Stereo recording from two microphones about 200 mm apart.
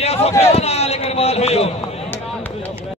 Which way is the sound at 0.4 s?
30° left (ahead or behind).